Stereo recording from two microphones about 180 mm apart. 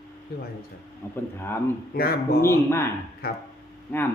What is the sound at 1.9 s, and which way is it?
Speech, 60° left (ahead or behind).